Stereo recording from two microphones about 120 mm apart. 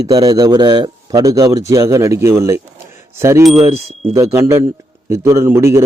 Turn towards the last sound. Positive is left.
turn(degrees=-25)  # may be behind; listen again after turning